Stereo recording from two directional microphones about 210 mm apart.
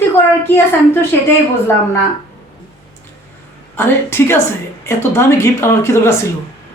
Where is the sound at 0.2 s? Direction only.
10° left (ahead or behind).